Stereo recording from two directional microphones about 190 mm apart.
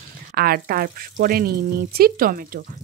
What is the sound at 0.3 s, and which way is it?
Speech, 55° right (ahead or behind).